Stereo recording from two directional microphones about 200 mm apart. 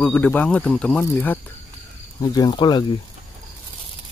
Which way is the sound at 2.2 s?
20° left (ahead or behind).